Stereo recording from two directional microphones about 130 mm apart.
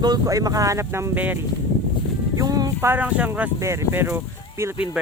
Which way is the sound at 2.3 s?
30° right (ahead or behind).